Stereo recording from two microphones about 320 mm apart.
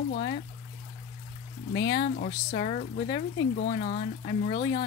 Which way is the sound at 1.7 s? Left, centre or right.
Left.